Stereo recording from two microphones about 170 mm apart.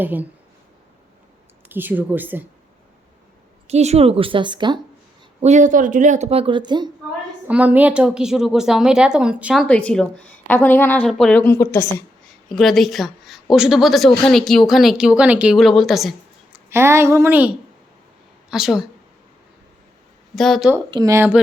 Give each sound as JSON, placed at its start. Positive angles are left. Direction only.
{"t": 0.0, "sound": "speech", "side_deg": -10}
{"t": 1.7, "sound": "speech", "side_deg": -10}
{"t": 3.7, "sound": "speech", "side_deg": -40}
{"t": 5.4, "sound": "speech", "side_deg": -45}
{"t": 7.4, "sound": "a woman's voice", "side_deg": -10}
{"t": 9.6, "sound": "a woman's voice", "side_deg": 5}
{"t": 12.5, "sound": "a woman's voice", "side_deg": 0}
{"t": 16.6, "sound": "speech", "side_deg": -15}
{"t": 18.5, "sound": "a woman's voice", "side_deg": -5}
{"t": 20.3, "sound": "a woman's voice", "side_deg": 0}
{"t": 20.9, "sound": "speech", "side_deg": -20}